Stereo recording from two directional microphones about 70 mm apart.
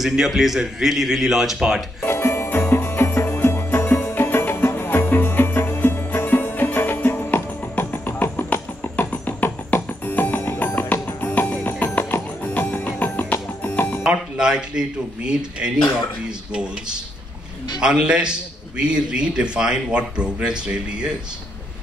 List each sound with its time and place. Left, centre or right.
0.0 s a man's voice: centre
2.0 s music: left
14.0 s a man's voice: centre
17.7 s a man's voice: centre